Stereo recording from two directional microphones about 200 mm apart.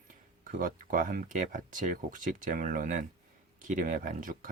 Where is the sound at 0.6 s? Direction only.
40° right (ahead or behind).